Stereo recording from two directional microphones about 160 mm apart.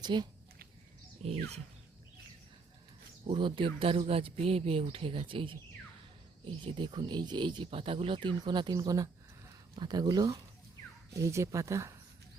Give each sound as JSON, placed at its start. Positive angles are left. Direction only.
{"t": 0.0, "sound": "speech", "side_deg": -25}
{"t": 1.2, "sound": "bird", "side_deg": 5}
{"t": 3.2, "sound": "speech", "side_deg": -30}